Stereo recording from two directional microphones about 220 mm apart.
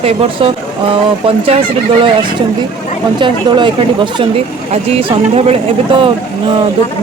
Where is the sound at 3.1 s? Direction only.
20° right (ahead or behind).